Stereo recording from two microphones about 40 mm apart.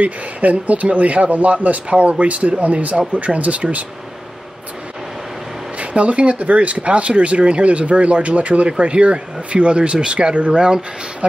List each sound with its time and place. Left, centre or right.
0.0 s speech: right
5.8 s speech: right